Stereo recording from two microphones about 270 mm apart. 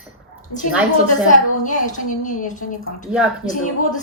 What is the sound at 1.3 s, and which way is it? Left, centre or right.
A woman's voice, left.